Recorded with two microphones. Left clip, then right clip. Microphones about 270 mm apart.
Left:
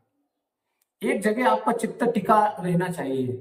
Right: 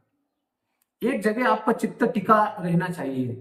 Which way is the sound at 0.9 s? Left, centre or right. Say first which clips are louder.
Even; left.